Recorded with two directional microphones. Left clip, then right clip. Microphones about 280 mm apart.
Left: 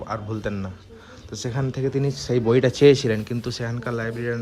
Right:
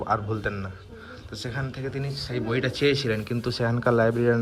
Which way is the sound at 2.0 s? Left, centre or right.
Left.